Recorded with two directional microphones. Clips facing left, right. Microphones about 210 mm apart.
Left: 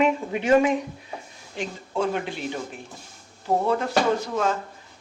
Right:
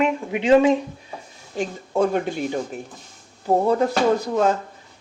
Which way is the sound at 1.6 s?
45° right (ahead or behind).